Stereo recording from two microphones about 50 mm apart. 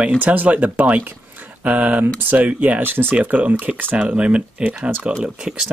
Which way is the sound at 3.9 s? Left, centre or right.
Right.